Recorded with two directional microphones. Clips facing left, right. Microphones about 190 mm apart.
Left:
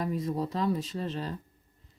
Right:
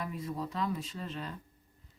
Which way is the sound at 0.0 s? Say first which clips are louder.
Left 7 dB; 40° left (ahead or behind).